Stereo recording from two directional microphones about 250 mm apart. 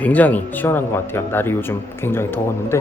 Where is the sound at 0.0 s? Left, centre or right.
Centre.